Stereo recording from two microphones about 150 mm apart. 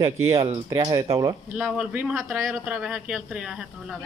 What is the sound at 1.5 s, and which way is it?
Speech, 5° right (ahead or behind).